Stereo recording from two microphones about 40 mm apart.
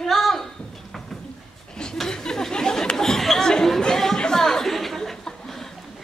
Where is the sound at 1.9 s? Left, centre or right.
Centre.